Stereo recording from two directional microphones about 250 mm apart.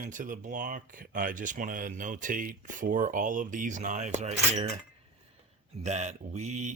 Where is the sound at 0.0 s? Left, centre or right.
Right.